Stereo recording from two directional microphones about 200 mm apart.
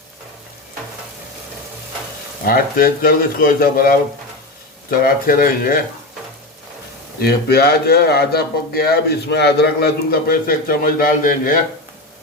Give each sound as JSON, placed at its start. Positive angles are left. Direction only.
{"t": 2.5, "sound": "a man's voice", "side_deg": 45}
{"t": 7.2, "sound": "a man's voice", "side_deg": 50}